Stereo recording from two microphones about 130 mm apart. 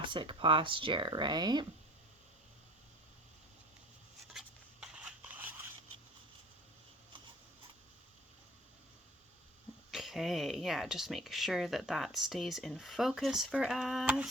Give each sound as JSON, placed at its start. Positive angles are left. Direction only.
{"t": 0.0, "sound": "speech", "side_deg": -40}
{"t": 4.3, "sound": "a sound", "side_deg": -5}
{"t": 9.9, "sound": "speech", "side_deg": 0}